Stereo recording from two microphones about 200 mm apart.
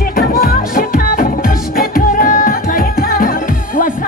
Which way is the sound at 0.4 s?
45° left (ahead or behind).